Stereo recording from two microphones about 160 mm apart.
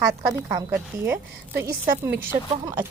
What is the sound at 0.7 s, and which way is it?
Speech, 15° right (ahead or behind).